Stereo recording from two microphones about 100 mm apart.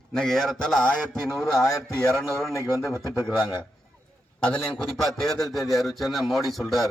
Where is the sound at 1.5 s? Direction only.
35° left (ahead or behind).